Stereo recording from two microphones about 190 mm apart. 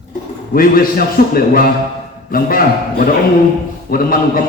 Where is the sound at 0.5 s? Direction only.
50° left (ahead or behind).